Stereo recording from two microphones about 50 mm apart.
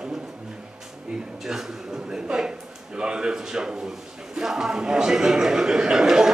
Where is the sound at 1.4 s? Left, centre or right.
Centre.